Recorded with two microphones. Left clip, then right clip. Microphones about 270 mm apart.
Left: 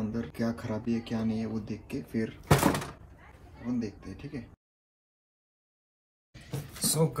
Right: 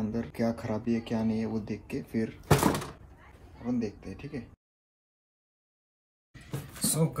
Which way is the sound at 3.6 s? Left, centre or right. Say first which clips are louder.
Right 2 dB; right.